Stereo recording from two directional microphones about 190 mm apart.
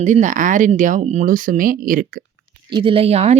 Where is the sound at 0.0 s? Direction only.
40° right (ahead or behind).